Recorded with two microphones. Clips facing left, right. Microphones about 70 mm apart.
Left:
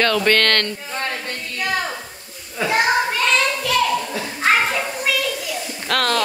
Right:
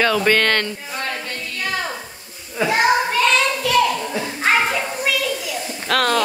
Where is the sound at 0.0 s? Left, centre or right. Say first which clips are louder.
Even; centre.